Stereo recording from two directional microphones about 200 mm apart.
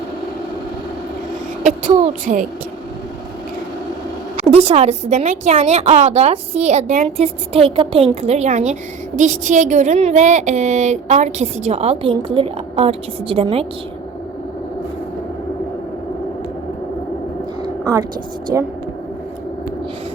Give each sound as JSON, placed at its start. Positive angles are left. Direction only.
{"t": 1.6, "sound": "a woman's voice", "side_deg": -40}
{"t": 4.5, "sound": "a woman's voice", "side_deg": -30}
{"t": 17.6, "sound": "a sound", "side_deg": -20}
{"t": 18.5, "sound": "speech", "side_deg": -10}